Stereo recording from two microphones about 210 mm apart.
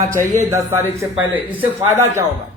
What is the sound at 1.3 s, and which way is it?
Speech, 10° right (ahead or behind).